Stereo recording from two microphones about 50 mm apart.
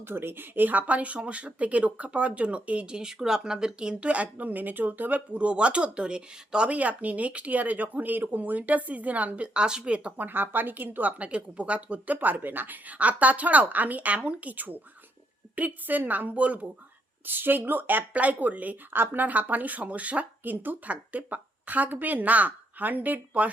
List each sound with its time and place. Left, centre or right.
0.0 s speech: right
10.2 s a woman's voice: right
17.2 s a woman's voice: right
18.1 s a woman's voice: right